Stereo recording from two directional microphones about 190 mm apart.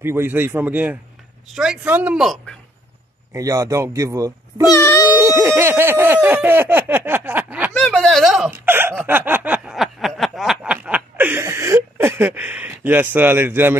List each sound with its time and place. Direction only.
0.0 s speech: 10° right (ahead or behind)
3.3 s speech: 20° right (ahead or behind)
4.7 s music: 15° left (ahead or behind)
5.2 s speech: 15° right (ahead or behind)
7.7 s a sound: 5° left (ahead or behind); by 13.7 s 10° right (ahead or behind)